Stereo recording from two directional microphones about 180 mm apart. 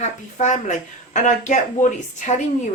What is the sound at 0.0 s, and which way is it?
Speech, 40° left (ahead or behind).